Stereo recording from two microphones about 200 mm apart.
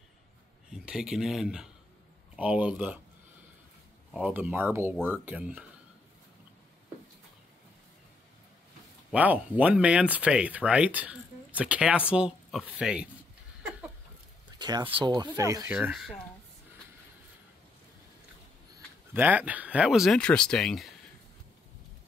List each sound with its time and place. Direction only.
0.7 s speech: 5° right (ahead or behind)
4.1 s speech: 5° right (ahead or behind)
9.1 s speech: 5° right (ahead or behind)
13.6 s a sound: 5° right (ahead or behind)
14.6 s speech: 20° right (ahead or behind); by 16.2 s 5° right (ahead or behind)
19.1 s speech: 10° right (ahead or behind)